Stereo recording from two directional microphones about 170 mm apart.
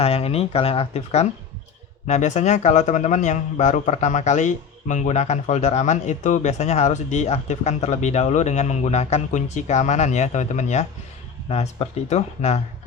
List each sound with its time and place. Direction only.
0.0 s a man's voice: 35° left (ahead or behind)